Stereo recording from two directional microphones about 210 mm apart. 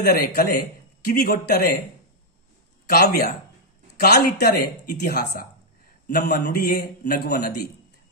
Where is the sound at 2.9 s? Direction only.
50° left (ahead or behind).